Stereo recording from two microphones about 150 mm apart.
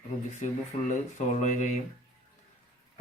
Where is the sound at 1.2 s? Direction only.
50° left (ahead or behind).